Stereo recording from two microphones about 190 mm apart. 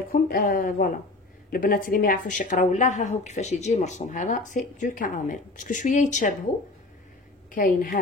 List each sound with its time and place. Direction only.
0.1 s a woman's voice: 50° left (ahead or behind)
7.5 s speech: 45° left (ahead or behind)